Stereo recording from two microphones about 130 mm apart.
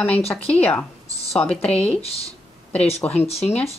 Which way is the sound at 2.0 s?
50° left (ahead or behind).